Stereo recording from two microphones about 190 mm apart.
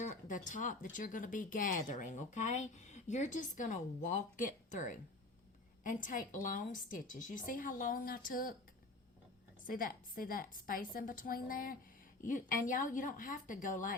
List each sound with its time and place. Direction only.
0.0 s speech: 45° left (ahead or behind)
9.6 s speech: 45° left (ahead or behind)